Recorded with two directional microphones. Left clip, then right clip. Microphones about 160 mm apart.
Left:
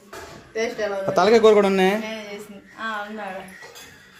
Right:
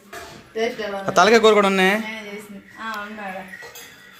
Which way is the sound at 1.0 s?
10° left (ahead or behind).